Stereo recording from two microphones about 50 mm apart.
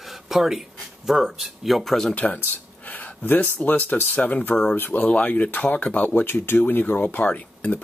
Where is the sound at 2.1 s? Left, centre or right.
Left.